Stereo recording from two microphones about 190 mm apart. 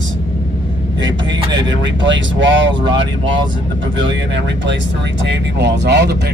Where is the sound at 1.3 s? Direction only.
25° right (ahead or behind).